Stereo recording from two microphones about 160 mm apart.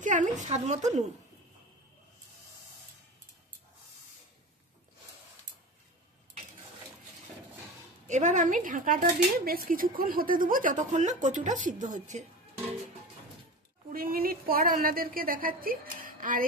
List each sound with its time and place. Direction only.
0.0 s a woman's voice: 50° right (ahead or behind)
8.1 s speech: 50° right (ahead or behind)
13.9 s a woman's voice: 65° right (ahead or behind)